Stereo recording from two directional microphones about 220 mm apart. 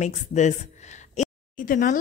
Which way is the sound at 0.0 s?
30° left (ahead or behind).